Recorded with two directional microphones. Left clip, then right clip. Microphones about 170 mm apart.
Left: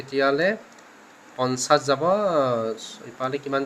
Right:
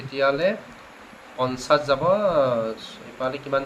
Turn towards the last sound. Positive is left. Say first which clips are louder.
# right 1 dB
turn(degrees=70)  # may be behind; listen again after turning